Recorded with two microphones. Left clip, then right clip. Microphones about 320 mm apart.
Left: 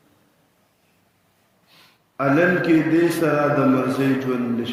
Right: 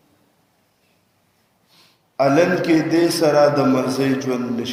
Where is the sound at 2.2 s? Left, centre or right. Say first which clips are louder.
Right 2 dB; centre.